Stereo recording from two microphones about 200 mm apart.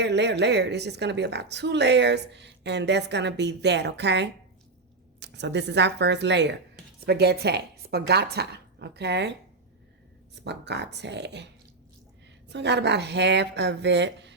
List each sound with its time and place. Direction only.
0.0 s a woman's voice: 60° right (ahead or behind)
10.4 s a woman's voice: 60° right (ahead or behind)